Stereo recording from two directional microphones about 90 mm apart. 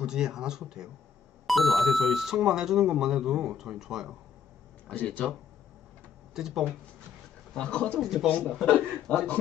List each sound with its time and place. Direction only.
0.0 s speech: 5° right (ahead or behind)
4.8 s a man's voice: 15° left (ahead or behind)
6.3 s speech: 5° right (ahead or behind)
7.5 s a man's voice: 10° left (ahead or behind)
8.0 s speech: 5° right (ahead or behind)
8.4 s a man's voice: 10° left (ahead or behind)